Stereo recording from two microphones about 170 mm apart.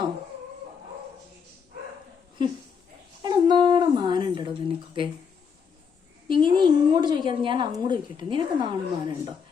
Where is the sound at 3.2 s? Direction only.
25° right (ahead or behind).